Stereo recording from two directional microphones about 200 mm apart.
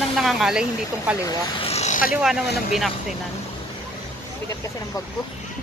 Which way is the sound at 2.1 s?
5° right (ahead or behind).